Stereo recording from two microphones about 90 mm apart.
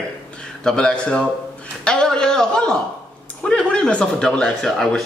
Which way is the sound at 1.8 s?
10° left (ahead or behind).